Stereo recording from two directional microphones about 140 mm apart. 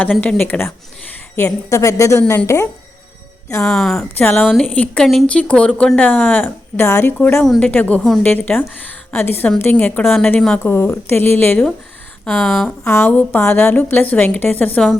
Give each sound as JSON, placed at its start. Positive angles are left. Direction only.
{"t": 0.2, "sound": "a woman's voice", "side_deg": 10}
{"t": 3.6, "sound": "speech", "side_deg": 5}
{"t": 4.2, "sound": "speech", "side_deg": 15}
{"t": 4.4, "sound": "a woman's voice", "side_deg": 0}
{"t": 10.0, "sound": "speech", "side_deg": 0}
{"t": 12.2, "sound": "speech", "side_deg": 0}
{"t": 12.8, "sound": "speech", "side_deg": 15}